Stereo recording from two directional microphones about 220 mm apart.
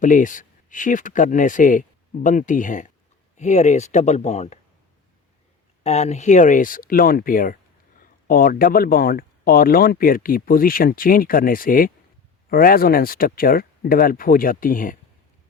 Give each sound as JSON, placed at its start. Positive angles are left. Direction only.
{"t": 0.0, "sound": "speech", "side_deg": 35}
{"t": 5.8, "sound": "speech", "side_deg": 30}